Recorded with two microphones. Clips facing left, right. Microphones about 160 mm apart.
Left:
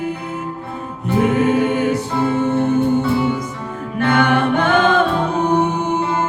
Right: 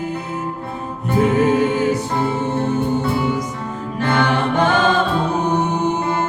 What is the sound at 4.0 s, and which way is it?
A capella, 55° left (ahead or behind).